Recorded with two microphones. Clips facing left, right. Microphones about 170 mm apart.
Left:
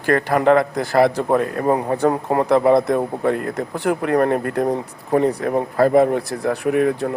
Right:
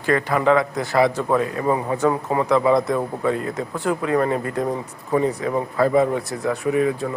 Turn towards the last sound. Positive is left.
turn(degrees=55)  # may be behind; listen again after turning